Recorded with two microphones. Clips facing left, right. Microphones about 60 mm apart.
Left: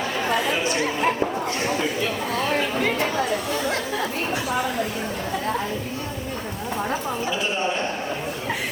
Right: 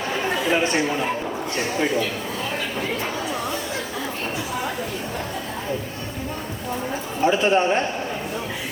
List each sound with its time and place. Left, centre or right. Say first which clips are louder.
7.3 s a man's voice: right 9 dB; right